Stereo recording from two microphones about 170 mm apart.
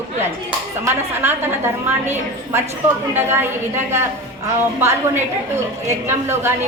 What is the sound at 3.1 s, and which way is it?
Speech, 15° right (ahead or behind).